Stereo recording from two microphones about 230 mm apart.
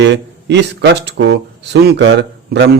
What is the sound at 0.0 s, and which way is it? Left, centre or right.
Speech, right.